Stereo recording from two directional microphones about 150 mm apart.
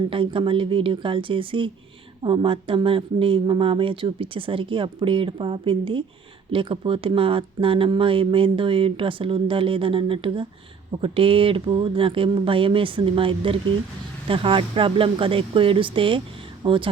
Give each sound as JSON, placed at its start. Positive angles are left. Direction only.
{"t": 0.1, "sound": "speech", "side_deg": -35}